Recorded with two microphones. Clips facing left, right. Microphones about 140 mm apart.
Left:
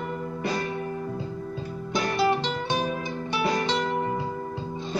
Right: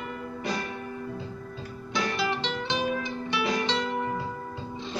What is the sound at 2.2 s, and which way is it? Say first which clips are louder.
Music: left 5 dB; 45° left (ahead or behind).